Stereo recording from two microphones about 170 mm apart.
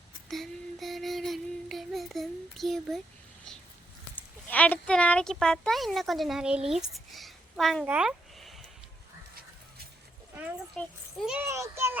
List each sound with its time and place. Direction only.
0.3 s child singing: centre (ahead or behind)
4.1 s speech: 10° left (ahead or behind)
6.7 s a sound: 5° right (ahead or behind)
10.8 s a child's voice: 5° left (ahead or behind)
11.3 s a child's voice: 15° right (ahead or behind)